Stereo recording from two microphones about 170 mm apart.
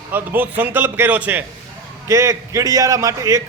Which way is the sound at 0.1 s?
10° right (ahead or behind).